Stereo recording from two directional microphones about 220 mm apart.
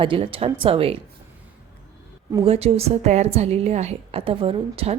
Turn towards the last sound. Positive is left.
turn(degrees=-25)  # may be behind; listen again after turning